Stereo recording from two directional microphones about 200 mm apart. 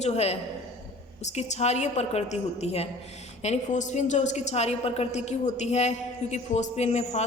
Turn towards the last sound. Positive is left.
turn(degrees=35)  # may be behind; listen again after turning